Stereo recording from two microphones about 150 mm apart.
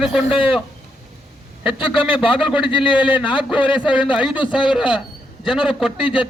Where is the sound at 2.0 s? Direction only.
35° left (ahead or behind).